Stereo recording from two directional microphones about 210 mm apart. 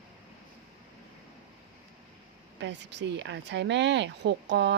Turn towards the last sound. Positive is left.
turn(degrees=-55)  # may be behind; listen again after turning